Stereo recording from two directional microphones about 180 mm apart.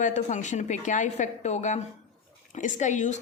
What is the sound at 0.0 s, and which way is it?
A woman's voice, 45° left (ahead or behind).